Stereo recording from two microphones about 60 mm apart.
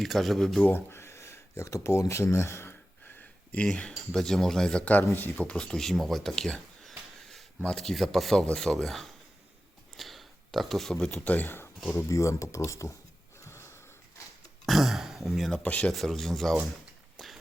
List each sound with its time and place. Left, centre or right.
0.0 s speech: centre
0.7 s speech: left
3.2 s a sound: left
3.8 s speech: centre
11.2 s speech: left
12.0 s speech: left
13.4 s wheeze: left
14.7 s speech: centre
15.6 s speech: left
15.9 s speech: centre
17.2 s a sound: centre